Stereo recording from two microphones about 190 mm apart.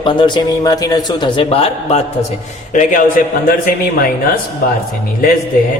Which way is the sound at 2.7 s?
45° left (ahead or behind).